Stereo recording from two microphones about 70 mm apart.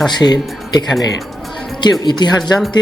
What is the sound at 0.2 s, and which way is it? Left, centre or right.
Speech, left.